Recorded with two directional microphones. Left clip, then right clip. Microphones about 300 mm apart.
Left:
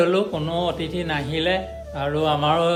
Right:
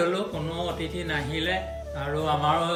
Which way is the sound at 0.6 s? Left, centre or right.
Left.